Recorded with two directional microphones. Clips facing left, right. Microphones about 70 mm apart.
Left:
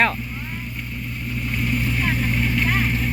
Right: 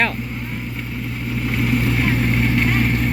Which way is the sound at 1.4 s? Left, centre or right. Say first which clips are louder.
Right 5 dB; right.